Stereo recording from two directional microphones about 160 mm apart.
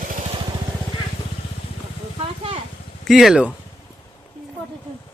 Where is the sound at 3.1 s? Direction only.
Centre (ahead or behind).